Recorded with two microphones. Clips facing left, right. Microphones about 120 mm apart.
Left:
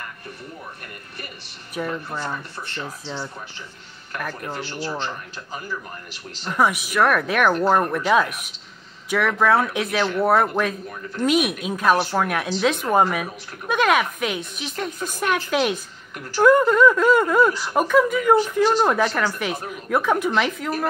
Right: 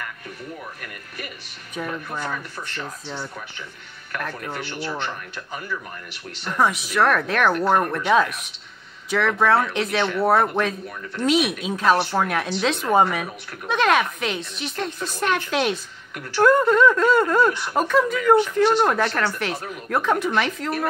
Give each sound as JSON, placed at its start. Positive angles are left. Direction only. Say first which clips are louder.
{"t": 1.8, "sound": "speech", "louder": "left 1 dB", "side_deg": 0}
{"t": 4.2, "sound": "speech", "louder": "left 1 dB", "side_deg": 5}
{"t": 4.6, "sound": "speech", "louder": "left 1 dB", "side_deg": 35}
{"t": 6.5, "sound": "speech", "louder": "left 1 dB", "side_deg": 10}